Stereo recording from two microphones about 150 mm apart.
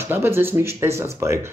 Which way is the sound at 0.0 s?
15° right (ahead or behind).